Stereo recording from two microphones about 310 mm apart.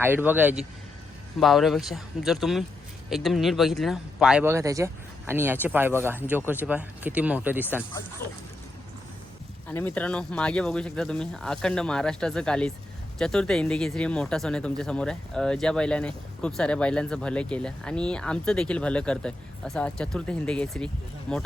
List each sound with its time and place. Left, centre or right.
0.0 s speech: centre
8.2 s speech: left
9.6 s speech: centre